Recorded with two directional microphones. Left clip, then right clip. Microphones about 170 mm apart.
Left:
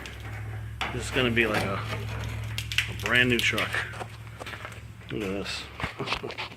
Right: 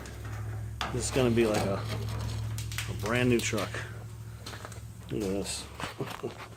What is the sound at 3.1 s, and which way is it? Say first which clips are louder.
Speech: left 6 dB; 20° right (ahead or behind).